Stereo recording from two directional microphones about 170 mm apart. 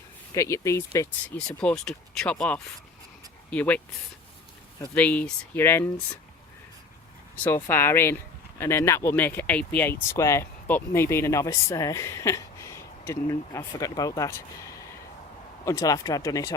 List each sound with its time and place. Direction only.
0.3 s speech: 15° left (ahead or behind)
1.4 s speech: 5° left (ahead or behind)
4.9 s speech: 10° left (ahead or behind)
7.4 s speech: 15° left (ahead or behind)